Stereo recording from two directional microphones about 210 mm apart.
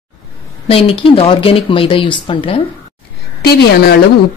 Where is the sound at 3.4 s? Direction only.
50° left (ahead or behind).